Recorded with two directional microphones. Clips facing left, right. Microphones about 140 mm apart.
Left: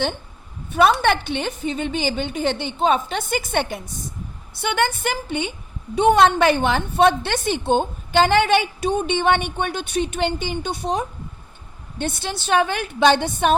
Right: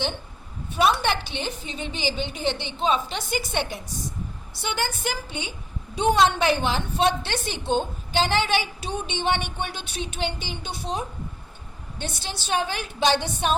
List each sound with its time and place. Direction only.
0.7 s a woman's voice: 55° left (ahead or behind)